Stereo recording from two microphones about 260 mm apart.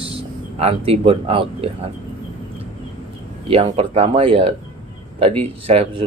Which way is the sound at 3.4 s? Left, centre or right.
Right.